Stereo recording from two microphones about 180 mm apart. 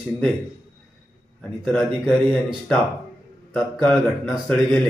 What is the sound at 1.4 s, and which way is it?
Mantra, 5° left (ahead or behind).